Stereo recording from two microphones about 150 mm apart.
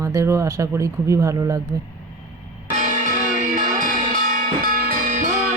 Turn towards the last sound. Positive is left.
turn(degrees=-65)  # may be behind; listen again after turning